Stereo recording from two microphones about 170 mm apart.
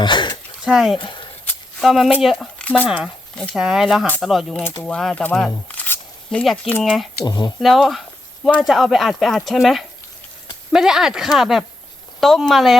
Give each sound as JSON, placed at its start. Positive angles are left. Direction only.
{"t": 0.0, "sound": "speech", "side_deg": 25}
{"t": 0.6, "sound": "speech", "side_deg": -5}
{"t": 0.9, "sound": "speech", "side_deg": 25}
{"t": 1.5, "sound": "a sound", "side_deg": 0}
{"t": 2.2, "sound": "speech", "side_deg": 0}
{"t": 2.8, "sound": "speech", "side_deg": -5}
{"t": 5.6, "sound": "a sound", "side_deg": 10}
{"t": 6.4, "sound": "speech", "side_deg": 0}
{"t": 7.3, "sound": "speech", "side_deg": 25}
{"t": 7.6, "sound": "speech", "side_deg": 0}